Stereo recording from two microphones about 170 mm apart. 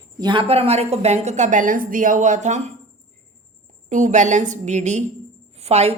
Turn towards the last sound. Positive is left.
turn(degrees=-40)  # may be behind; listen again after turning